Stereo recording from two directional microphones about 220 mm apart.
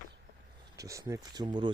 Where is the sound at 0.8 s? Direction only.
15° right (ahead or behind).